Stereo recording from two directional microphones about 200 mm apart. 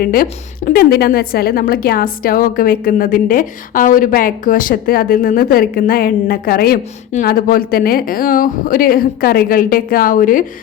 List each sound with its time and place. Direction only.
0.0 s a woman's voice: 45° left (ahead or behind)